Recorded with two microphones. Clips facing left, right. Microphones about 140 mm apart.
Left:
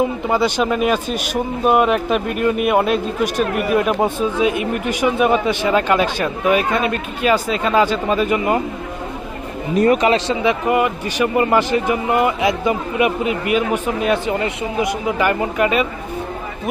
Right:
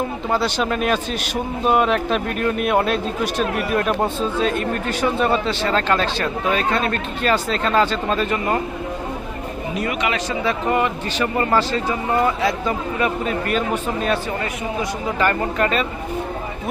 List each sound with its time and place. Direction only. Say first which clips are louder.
0.3 s speech: even; 15° left (ahead or behind)
9.7 s speech: left 10 dB; 40° left (ahead or behind)
10.4 s speech: even; 10° left (ahead or behind)